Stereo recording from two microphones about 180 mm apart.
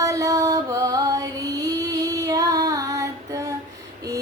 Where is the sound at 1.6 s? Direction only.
20° right (ahead or behind).